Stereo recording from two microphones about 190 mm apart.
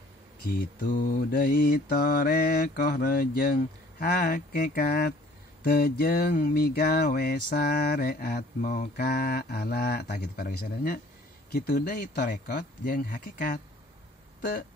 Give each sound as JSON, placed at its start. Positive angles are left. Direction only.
{"t": 0.5, "sound": "mantra", "side_deg": 45}